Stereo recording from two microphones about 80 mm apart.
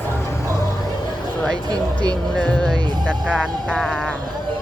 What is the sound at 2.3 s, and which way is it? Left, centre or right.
Speech, centre.